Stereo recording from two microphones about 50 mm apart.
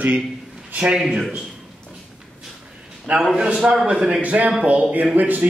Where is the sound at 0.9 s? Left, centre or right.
Centre.